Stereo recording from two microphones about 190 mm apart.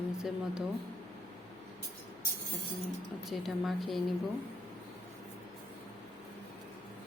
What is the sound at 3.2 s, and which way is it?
Speech, centre (ahead or behind).